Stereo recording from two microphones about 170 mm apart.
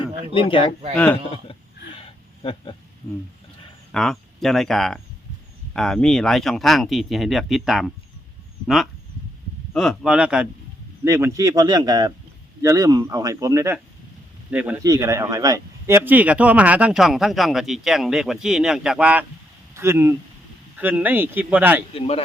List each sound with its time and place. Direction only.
0.3 s speech: 30° left (ahead or behind)
1.5 s a sound: 30° left (ahead or behind)
3.9 s speech: centre (ahead or behind)
11.0 s a man's voice: 15° right (ahead or behind)
14.8 s speech: 20° right (ahead or behind)
21.9 s speech: 35° left (ahead or behind)